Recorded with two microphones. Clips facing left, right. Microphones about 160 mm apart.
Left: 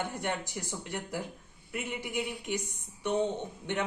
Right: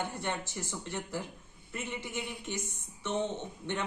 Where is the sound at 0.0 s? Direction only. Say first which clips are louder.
Left 2 dB; 15° left (ahead or behind).